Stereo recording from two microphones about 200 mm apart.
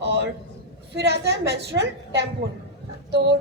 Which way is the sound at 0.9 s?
60° right (ahead or behind).